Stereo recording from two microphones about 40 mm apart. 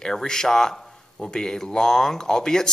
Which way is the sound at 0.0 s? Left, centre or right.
Centre.